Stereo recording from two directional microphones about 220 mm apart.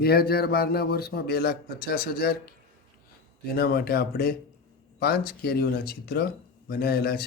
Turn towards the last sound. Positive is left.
turn(degrees=45)  # may be behind; listen again after turning